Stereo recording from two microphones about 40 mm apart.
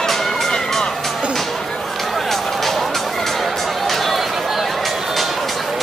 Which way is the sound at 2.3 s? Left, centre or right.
Centre.